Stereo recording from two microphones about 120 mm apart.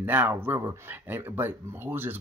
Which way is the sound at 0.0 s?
15° right (ahead or behind).